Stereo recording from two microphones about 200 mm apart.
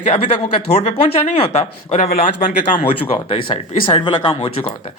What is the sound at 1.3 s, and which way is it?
Speech, 30° left (ahead or behind).